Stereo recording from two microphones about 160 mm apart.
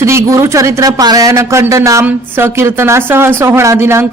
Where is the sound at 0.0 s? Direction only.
15° right (ahead or behind).